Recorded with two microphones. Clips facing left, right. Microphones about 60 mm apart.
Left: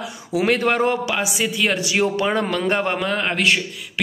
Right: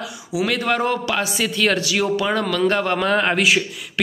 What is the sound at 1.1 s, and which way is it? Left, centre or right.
Speech, centre.